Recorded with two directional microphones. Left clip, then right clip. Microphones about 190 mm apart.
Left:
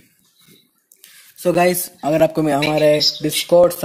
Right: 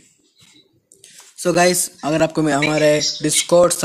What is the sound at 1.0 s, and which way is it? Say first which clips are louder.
Speech: left 1 dB; centre (ahead or behind).